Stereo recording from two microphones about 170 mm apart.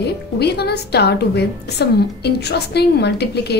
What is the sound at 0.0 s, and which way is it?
A woman's voice, 75° left (ahead or behind).